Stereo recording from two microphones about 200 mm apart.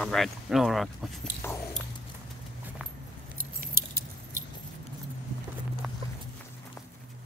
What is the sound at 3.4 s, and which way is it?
Keys jangling, 50° right (ahead or behind).